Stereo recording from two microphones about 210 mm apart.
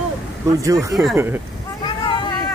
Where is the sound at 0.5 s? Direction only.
15° right (ahead or behind).